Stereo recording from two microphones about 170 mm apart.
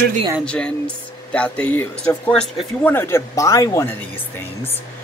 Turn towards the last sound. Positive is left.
turn(degrees=15)  # may be behind; listen again after turning